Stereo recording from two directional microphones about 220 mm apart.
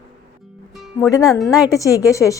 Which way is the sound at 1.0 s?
15° left (ahead or behind).